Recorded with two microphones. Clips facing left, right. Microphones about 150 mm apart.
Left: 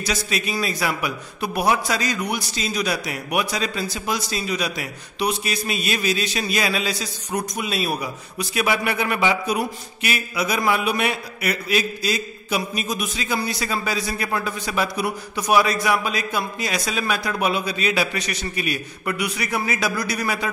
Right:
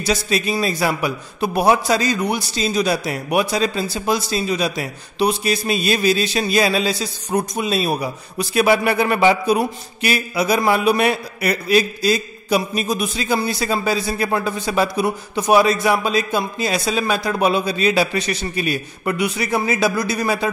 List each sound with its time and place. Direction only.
0.0 s a man's voice: 30° right (ahead or behind)